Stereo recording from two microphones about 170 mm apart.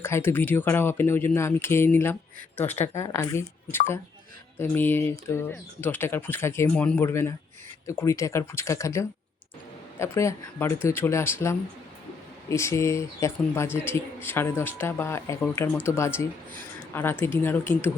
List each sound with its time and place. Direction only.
0.0 s speech: 15° left (ahead or behind)